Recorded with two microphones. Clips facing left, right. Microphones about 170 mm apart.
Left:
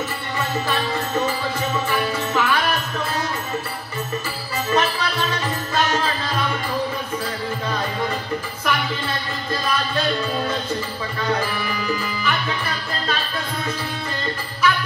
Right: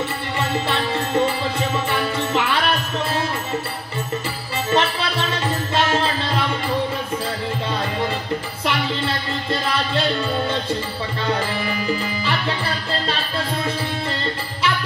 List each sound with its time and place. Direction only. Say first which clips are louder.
0.4 s music: right 1 dB; 25° right (ahead or behind)
4.6 s music: right 1 dB; 25° right (ahead or behind)
8.6 s music: right 2 dB; 25° right (ahead or behind)
11.3 s music: right 1 dB; 25° right (ahead or behind)